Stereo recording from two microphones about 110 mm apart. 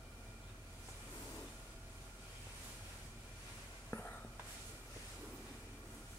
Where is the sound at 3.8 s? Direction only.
20° left (ahead or behind).